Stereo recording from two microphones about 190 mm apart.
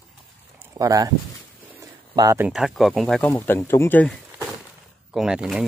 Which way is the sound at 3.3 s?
10° left (ahead or behind).